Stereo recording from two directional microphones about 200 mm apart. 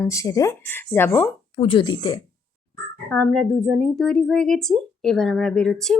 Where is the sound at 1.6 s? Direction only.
25° left (ahead or behind).